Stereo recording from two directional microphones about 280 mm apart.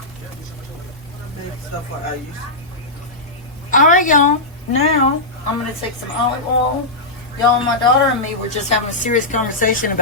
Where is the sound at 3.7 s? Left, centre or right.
Left.